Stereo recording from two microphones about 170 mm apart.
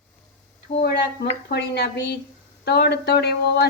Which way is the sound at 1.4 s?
75° left (ahead or behind).